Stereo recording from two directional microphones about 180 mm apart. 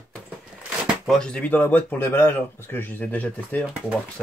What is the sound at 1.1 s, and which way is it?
Speech, 5° left (ahead or behind).